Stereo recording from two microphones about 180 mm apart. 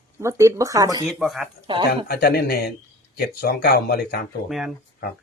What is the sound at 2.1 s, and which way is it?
Speech, 60° left (ahead or behind).